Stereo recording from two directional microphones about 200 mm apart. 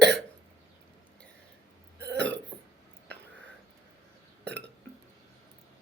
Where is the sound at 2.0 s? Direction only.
60° right (ahead or behind).